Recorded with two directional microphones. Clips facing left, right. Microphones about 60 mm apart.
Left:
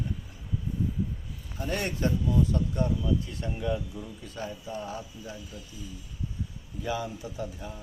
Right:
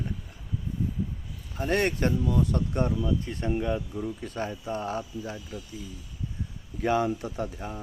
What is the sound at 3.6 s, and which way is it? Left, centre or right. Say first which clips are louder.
Speech: right 2 dB; right.